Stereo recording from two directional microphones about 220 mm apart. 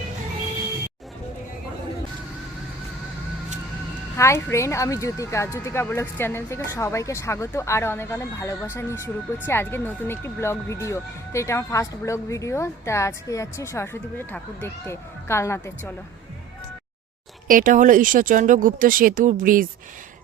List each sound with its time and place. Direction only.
4.2 s speech: 10° left (ahead or behind)
17.5 s speech: 35° right (ahead or behind)